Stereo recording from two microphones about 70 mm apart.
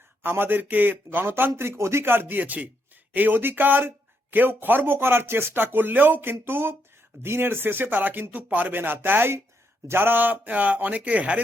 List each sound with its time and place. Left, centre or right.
0.2 s a man's voice: right